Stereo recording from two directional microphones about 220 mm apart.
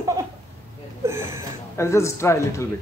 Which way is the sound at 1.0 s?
10° right (ahead or behind).